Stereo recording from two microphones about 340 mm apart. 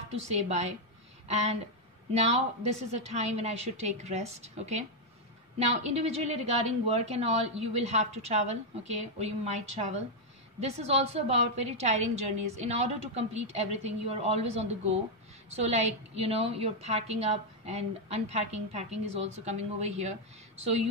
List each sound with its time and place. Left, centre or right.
0.1 s a woman's voice: centre